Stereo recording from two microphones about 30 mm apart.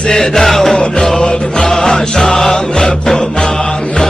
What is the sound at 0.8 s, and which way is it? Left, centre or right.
Music, left.